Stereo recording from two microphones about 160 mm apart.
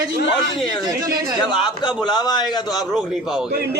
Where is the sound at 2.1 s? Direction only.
25° left (ahead or behind).